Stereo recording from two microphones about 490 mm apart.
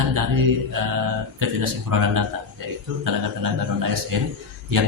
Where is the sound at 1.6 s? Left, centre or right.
Right.